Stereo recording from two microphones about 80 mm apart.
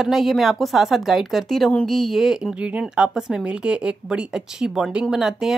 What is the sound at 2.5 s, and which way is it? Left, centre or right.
A woman's voice, centre.